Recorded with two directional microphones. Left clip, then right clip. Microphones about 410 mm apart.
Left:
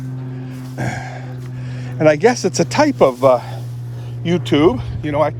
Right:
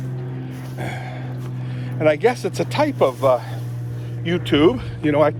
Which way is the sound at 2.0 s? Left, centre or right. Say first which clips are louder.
Left 4 dB; left.